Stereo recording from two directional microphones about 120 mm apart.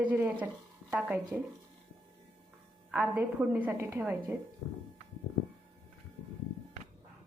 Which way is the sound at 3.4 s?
10° right (ahead or behind).